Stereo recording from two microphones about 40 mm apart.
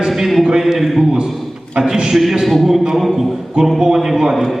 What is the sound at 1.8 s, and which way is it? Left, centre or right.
A man's voice, centre.